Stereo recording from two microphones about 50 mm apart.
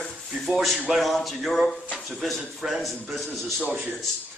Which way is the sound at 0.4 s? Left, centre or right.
Centre.